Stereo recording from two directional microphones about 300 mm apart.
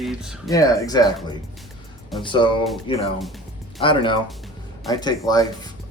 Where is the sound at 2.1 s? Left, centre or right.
Centre.